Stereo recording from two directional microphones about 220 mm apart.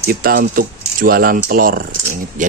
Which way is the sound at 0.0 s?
40° right (ahead or behind).